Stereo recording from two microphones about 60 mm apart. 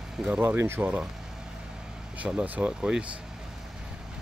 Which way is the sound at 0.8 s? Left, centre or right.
Centre.